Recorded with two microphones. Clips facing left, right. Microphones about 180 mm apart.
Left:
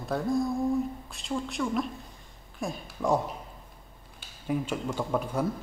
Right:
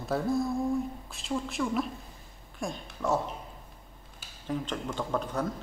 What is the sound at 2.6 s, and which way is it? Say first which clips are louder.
Speech: left 2 dB; 10° left (ahead or behind).